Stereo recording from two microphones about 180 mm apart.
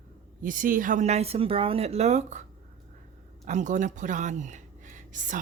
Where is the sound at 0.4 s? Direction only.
50° right (ahead or behind).